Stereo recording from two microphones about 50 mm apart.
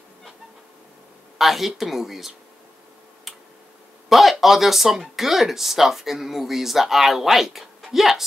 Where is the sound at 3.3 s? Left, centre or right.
Centre.